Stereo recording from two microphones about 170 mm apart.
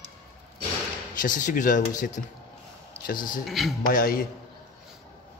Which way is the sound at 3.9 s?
55° left (ahead or behind).